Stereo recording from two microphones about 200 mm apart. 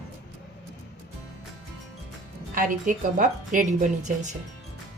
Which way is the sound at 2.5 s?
40° right (ahead or behind).